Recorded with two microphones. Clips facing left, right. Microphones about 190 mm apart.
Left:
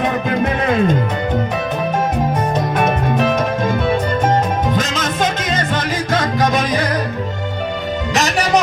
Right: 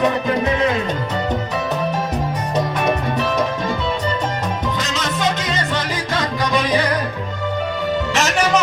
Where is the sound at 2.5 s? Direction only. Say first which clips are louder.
Left 2 dB; 50° left (ahead or behind).